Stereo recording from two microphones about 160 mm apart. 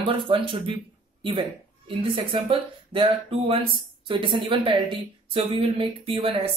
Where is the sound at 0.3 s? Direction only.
35° right (ahead or behind).